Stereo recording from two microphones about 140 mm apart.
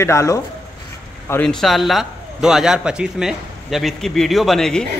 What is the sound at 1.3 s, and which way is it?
A man's voice, 5° left (ahead or behind).